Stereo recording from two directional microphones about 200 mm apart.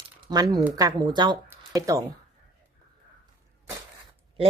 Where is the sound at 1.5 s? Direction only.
15° right (ahead or behind).